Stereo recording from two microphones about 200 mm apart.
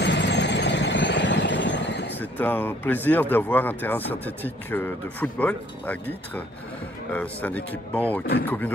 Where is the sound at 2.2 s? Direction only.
10° left (ahead or behind).